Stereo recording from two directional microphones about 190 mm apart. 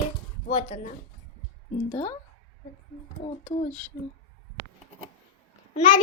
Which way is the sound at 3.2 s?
35° left (ahead or behind).